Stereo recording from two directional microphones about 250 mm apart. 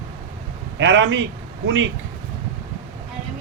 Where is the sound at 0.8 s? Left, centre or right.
Right.